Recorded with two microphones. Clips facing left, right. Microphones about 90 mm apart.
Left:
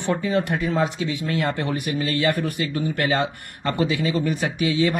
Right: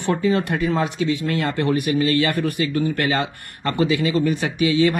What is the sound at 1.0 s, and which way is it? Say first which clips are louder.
Speech: right 3 dB; 20° left (ahead or behind).